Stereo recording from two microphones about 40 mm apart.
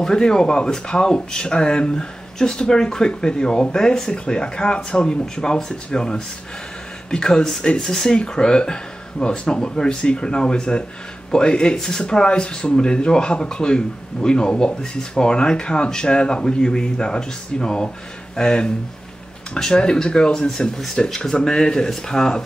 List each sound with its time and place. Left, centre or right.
0.0 s speech: centre
7.8 s speech: centre
8.1 s speech: centre